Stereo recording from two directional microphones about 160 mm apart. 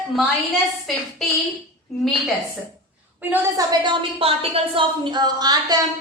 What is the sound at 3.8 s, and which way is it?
A woman's voice, 35° right (ahead or behind).